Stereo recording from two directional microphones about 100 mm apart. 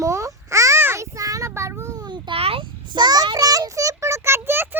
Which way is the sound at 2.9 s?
45° right (ahead or behind).